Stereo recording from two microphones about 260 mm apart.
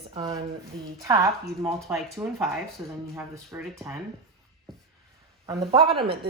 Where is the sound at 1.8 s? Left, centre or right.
Centre.